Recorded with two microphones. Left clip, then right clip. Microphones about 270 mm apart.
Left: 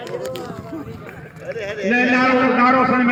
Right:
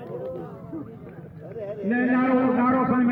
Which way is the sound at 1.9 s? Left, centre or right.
Left.